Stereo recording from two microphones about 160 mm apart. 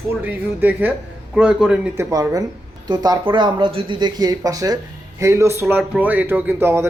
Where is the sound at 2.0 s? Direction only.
20° right (ahead or behind).